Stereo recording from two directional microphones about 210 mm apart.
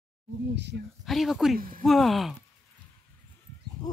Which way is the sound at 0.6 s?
55° right (ahead or behind).